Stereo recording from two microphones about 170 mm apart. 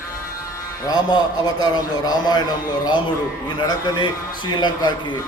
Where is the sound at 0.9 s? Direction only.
25° left (ahead or behind).